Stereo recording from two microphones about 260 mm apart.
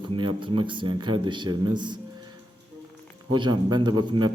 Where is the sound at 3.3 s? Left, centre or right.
Centre.